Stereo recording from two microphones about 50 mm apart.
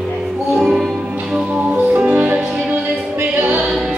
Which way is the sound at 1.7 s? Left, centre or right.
Right.